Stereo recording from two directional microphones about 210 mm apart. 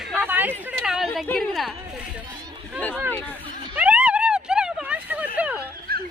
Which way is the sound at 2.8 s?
5° left (ahead or behind).